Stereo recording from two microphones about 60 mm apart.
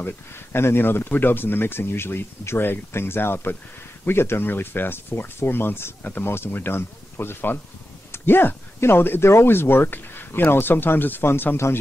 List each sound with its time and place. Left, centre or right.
0.0 s speech: left